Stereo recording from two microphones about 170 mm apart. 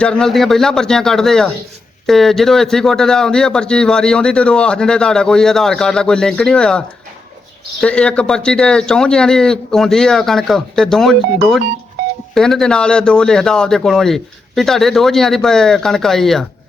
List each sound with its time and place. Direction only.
0.0 s a man's voice: 5° left (ahead or behind)
12.3 s a man's voice: 5° left (ahead or behind)